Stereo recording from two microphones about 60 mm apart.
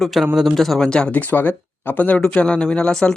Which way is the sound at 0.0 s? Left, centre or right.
Centre.